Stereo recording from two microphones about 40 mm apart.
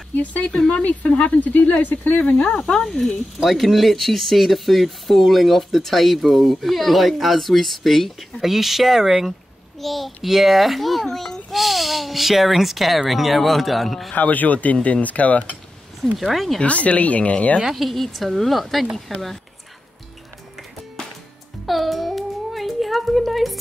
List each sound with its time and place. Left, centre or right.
0.1 s speech: left
0.6 s speech: centre
0.8 s speech: left
1.5 s speech: left
2.8 s speech: centre
3.3 s speech: centre
11.1 s a child's voice: centre
11.5 s speech: centre
14.1 s speech: left
16.2 s speech: centre
16.6 s speech: left
17.6 s a woman's voice: centre
17.8 s speech: centre
21.6 s a sound: centre